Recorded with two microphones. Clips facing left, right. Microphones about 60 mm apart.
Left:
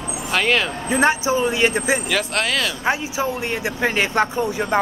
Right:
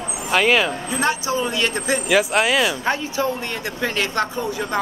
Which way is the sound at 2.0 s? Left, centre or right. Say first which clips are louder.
Right 4 dB; centre.